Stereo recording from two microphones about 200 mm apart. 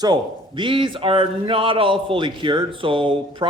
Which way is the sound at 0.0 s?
20° right (ahead or behind).